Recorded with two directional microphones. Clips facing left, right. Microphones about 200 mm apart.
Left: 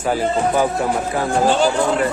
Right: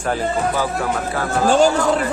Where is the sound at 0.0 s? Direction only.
10° left (ahead or behind).